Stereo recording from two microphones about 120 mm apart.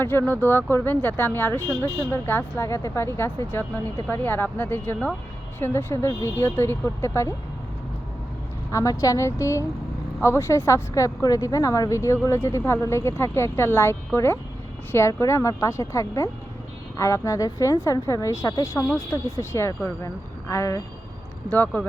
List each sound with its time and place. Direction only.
0.0 s speech: 20° left (ahead or behind)
8.7 s speech: 25° left (ahead or behind)
21.5 s speech: 15° left (ahead or behind)